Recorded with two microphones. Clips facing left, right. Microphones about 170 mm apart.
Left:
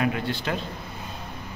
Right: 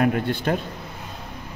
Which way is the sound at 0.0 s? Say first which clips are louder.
Right 5 dB; 55° right (ahead or behind).